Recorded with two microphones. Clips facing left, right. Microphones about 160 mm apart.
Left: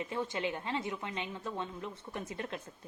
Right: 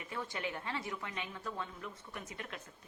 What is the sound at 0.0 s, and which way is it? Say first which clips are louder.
A woman's voice: left 6 dB; 25° left (ahead or behind).